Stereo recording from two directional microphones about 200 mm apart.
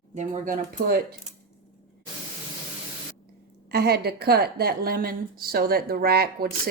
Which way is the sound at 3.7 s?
50° right (ahead or behind).